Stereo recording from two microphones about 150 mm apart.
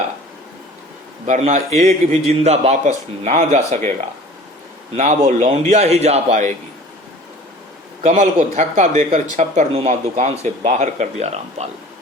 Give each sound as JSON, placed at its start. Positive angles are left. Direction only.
{"t": 1.3, "sound": "a man's voice", "side_deg": -55}
{"t": 4.9, "sound": "a man's voice", "side_deg": -50}
{"t": 8.0, "sound": "a man's voice", "side_deg": -55}